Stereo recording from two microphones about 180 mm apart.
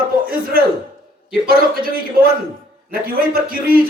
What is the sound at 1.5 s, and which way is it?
A man's voice, 55° right (ahead or behind).